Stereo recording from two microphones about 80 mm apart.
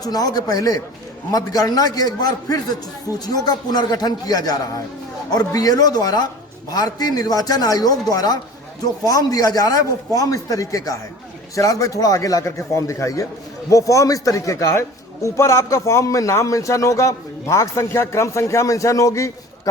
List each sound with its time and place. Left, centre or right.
0.0 s a man's voice: left